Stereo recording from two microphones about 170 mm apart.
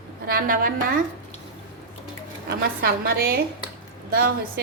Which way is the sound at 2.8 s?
60° right (ahead or behind).